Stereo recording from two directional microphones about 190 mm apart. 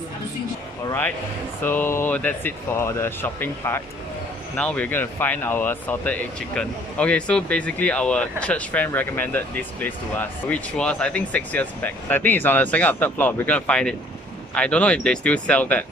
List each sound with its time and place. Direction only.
0.8 s speech: 10° left (ahead or behind)